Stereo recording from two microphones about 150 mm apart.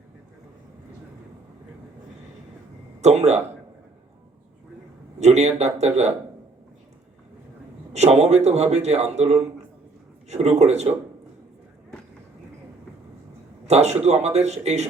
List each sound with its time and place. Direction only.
3.0 s speech: 50° right (ahead or behind)
5.2 s a man's voice: 50° right (ahead or behind)
7.9 s a man's voice: 50° right (ahead or behind)
13.7 s a man's voice: 45° right (ahead or behind)